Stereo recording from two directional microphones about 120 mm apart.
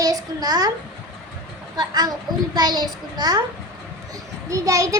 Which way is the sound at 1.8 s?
30° right (ahead or behind).